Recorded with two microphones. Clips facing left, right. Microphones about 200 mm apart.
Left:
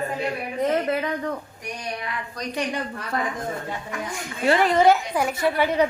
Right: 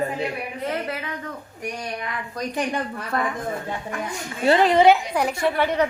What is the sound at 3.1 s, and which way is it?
Speech, 55° right (ahead or behind).